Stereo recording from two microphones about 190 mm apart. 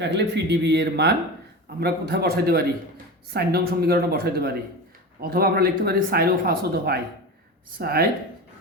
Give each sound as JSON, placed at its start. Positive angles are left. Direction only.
{"t": 0.0, "sound": "speech", "side_deg": -65}